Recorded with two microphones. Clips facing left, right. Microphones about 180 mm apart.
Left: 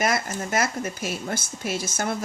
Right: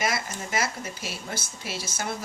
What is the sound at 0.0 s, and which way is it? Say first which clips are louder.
Speech: left 4 dB; 50° left (ahead or behind).